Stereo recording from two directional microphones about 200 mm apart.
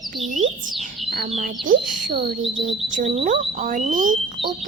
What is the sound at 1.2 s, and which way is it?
Speech, 35° right (ahead or behind).